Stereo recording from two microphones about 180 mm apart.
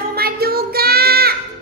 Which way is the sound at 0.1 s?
60° right (ahead or behind).